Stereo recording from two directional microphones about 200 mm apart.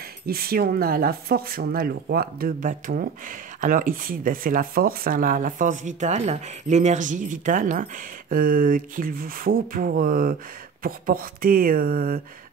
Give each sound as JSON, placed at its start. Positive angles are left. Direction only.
{"t": 0.3, "sound": "speech", "side_deg": -50}